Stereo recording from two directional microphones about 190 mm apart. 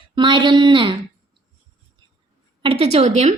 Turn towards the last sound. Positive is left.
turn(degrees=-35)  # may be behind; listen again after turning